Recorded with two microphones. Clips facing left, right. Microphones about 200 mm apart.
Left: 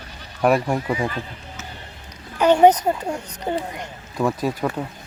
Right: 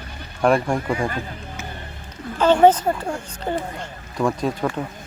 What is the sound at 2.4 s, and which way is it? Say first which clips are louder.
Speech: even; 15° left (ahead or behind).